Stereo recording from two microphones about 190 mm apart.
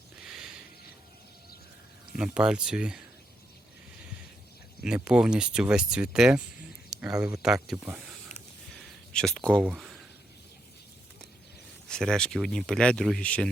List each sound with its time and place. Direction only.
0.2 s a sound: 5° right (ahead or behind)
2.1 s speech: 5° right (ahead or behind)
4.8 s speech: 5° right (ahead or behind)
8.3 s a sound: 35° left (ahead or behind)
9.1 s speech: 5° left (ahead or behind)
11.9 s speech: 5° left (ahead or behind)